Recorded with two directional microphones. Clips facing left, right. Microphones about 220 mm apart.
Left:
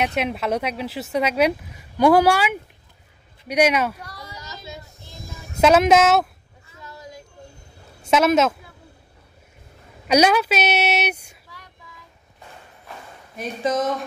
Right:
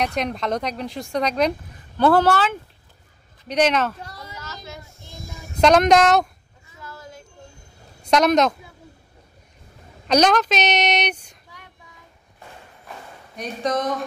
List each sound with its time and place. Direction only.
0.0 s speech: 5° left (ahead or behind)
4.3 s a sound: 15° left (ahead or behind)
5.6 s speech: 5° left (ahead or behind)
6.8 s a sound: 15° left (ahead or behind)
8.0 s speech: 5° left (ahead or behind)
10.0 s speech: 10° left (ahead or behind)
13.4 s speech: 5° left (ahead or behind)